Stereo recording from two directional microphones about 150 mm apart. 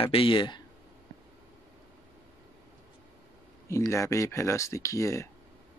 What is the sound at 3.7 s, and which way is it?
Speech, 20° left (ahead or behind).